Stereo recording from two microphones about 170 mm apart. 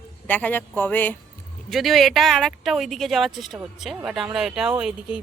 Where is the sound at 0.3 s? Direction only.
10° left (ahead or behind).